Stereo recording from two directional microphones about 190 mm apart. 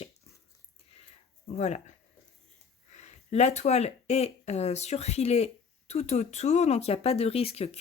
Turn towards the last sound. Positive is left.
turn(degrees=30)  # may be behind; listen again after turning